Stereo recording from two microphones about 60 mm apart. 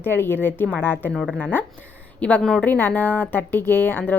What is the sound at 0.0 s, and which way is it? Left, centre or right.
Speech, left.